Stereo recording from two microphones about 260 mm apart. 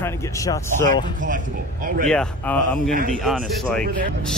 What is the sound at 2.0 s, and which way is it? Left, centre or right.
Speech, centre.